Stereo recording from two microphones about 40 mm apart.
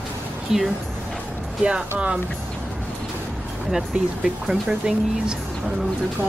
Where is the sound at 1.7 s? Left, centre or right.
Right.